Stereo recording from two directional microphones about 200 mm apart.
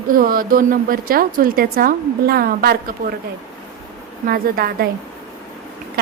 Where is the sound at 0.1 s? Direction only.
45° right (ahead or behind).